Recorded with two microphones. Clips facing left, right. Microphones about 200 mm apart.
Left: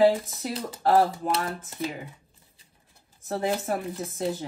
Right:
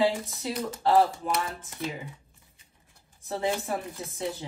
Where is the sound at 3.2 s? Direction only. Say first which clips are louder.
Left 2 dB; 45° left (ahead or behind).